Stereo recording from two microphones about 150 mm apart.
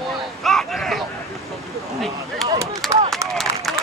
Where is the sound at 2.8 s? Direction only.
Centre (ahead or behind).